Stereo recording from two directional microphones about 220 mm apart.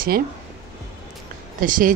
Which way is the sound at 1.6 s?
40° right (ahead or behind).